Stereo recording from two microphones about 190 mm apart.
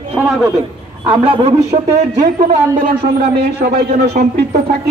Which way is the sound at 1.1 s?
25° right (ahead or behind).